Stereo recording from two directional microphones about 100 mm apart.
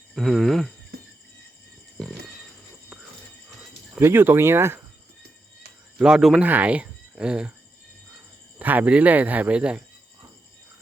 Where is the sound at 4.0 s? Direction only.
25° right (ahead or behind).